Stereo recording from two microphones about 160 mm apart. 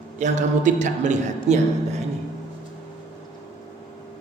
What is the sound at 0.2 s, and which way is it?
A man's voice, 50° right (ahead or behind).